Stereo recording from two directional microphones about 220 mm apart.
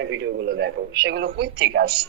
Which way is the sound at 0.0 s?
55° right (ahead or behind).